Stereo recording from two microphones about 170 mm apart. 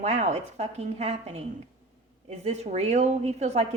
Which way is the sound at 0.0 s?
40° right (ahead or behind).